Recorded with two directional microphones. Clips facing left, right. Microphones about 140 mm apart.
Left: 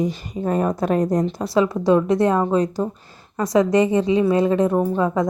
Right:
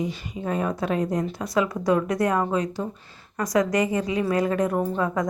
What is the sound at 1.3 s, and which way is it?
Speech, 30° left (ahead or behind).